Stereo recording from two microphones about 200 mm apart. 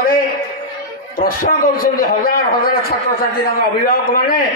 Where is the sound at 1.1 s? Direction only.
45° left (ahead or behind).